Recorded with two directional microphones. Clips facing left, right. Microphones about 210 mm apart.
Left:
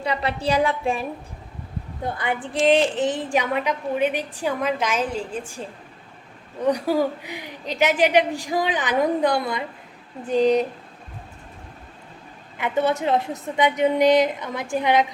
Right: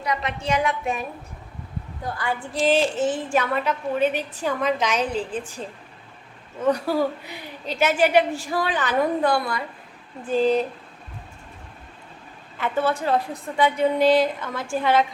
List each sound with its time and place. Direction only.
0.0 s a woman's voice: 30° left (ahead or behind)
2.0 s a woman's voice: 20° left (ahead or behind)
5.1 s a woman's voice: 45° left (ahead or behind)
6.6 s a woman's voice: 15° left (ahead or behind)
12.5 s a woman's voice: 20° left (ahead or behind)